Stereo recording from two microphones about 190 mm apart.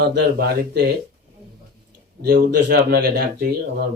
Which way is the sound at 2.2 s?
60° right (ahead or behind).